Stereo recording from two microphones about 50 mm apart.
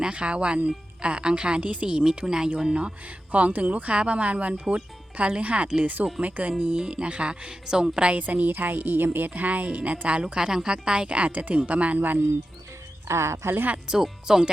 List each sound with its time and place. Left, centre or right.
0.0 s a woman's voice: right
3.3 s a woman's voice: right
8.3 s a woman's voice: right
13.1 s speech: right
13.9 s speech: centre